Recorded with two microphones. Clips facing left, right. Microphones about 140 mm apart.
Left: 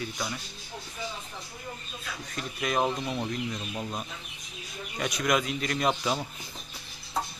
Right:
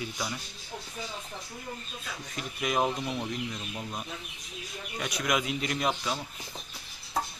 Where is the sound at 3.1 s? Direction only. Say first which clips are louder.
Left 2 dB; 15° left (ahead or behind).